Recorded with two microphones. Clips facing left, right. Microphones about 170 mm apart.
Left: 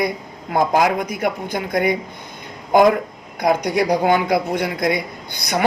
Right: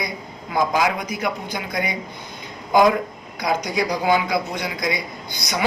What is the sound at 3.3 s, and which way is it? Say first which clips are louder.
A man's voice: left 5 dB; 60° left (ahead or behind).